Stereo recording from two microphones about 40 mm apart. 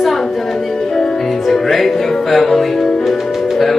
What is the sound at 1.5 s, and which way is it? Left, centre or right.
Music, centre.